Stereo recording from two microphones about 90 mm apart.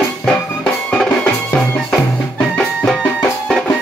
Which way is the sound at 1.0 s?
10° left (ahead or behind).